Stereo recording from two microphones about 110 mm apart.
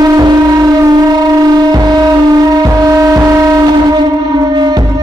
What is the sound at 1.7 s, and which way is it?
Music, 40° right (ahead or behind).